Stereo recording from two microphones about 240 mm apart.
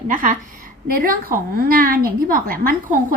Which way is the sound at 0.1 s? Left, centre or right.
Right.